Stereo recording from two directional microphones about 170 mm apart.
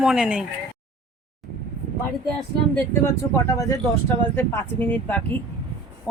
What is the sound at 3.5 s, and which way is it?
Speech, 20° left (ahead or behind).